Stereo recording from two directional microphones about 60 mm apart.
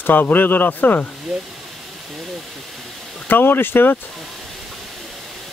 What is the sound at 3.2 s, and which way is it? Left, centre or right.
Speech, left.